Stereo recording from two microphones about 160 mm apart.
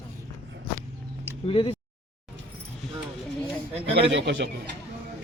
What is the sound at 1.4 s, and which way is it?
Speech, 35° left (ahead or behind).